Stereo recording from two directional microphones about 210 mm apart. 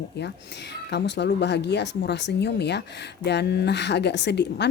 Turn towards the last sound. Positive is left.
turn(degrees=55)  # may be behind; listen again after turning